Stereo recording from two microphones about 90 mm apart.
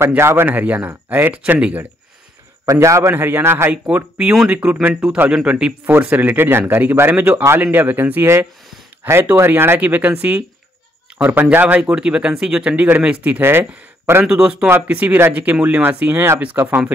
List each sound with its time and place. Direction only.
0.2 s speech: 25° right (ahead or behind)
2.6 s speech: 35° right (ahead or behind)
3.7 s speech: 15° right (ahead or behind)
5.3 s speech: 10° right (ahead or behind)
11.5 s speech: 15° right (ahead or behind)
14.4 s speech: 10° right (ahead or behind)